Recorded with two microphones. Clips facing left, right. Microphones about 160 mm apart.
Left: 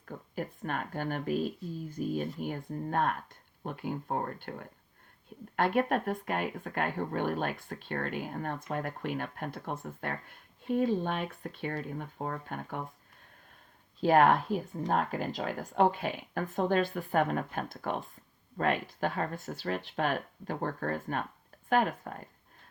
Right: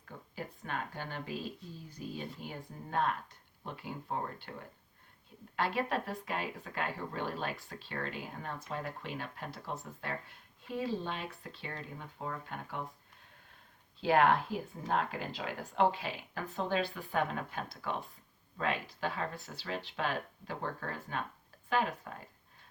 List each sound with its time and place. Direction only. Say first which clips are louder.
0.0 s speech: left 6 dB; 50° left (ahead or behind)
14.0 s speech: left 4 dB; 45° left (ahead or behind)